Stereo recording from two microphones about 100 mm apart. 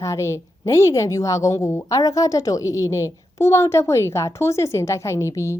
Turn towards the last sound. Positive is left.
turn(degrees=30)  # may be behind; listen again after turning